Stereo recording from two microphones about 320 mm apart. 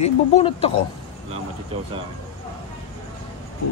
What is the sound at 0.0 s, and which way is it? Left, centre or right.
Speech, centre.